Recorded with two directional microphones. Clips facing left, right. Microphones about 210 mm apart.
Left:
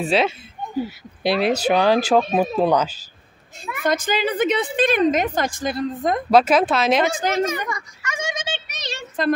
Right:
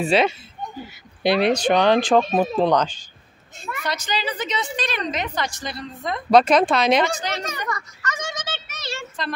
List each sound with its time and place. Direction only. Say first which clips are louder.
0.0 s a woman's voice: right 1 dB; centre (ahead or behind)
3.8 s a woman's voice: left 7 dB; 50° left (ahead or behind)
6.3 s a woman's voice: right 1 dB; 5° left (ahead or behind)
7.1 s a woman's voice: left 7 dB; 50° left (ahead or behind)
7.4 s a sound: left 4 dB; 10° left (ahead or behind)